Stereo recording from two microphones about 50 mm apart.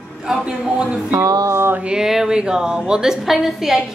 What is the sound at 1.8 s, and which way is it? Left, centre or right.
A woman's voice, centre.